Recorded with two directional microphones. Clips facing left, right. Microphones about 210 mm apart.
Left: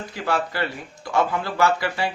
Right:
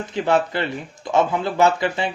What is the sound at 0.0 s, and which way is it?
Speech, 20° right (ahead or behind).